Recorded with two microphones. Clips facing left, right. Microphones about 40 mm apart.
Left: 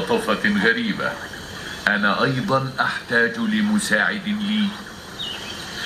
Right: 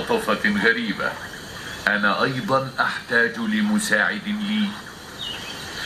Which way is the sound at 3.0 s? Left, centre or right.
Centre.